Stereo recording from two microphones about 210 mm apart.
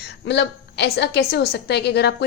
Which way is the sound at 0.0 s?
55° left (ahead or behind).